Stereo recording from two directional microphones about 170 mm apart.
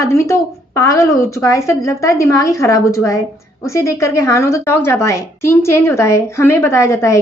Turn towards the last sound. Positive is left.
turn(degrees=15)  # may be behind; listen again after turning